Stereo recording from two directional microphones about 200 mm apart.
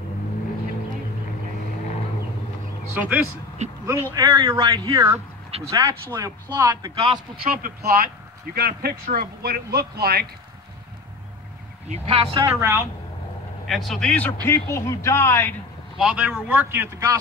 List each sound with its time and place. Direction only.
2.9 s speech: 10° right (ahead or behind)
7.4 s speech: 45° right (ahead or behind)
11.9 s speech: 30° right (ahead or behind)
12.4 s speech: 10° right (ahead or behind)
13.7 s a man's voice: centre (ahead or behind)
16.0 s speech: 5° right (ahead or behind)